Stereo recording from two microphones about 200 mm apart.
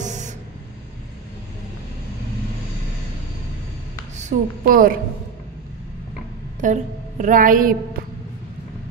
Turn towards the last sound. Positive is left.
turn(degrees=-45)  # may be behind; listen again after turning